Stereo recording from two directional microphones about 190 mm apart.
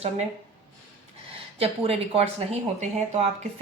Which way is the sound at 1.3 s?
30° right (ahead or behind).